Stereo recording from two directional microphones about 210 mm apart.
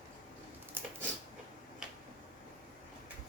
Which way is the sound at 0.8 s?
10° right (ahead or behind).